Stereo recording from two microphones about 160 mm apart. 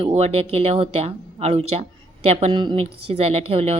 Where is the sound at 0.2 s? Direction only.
40° right (ahead or behind).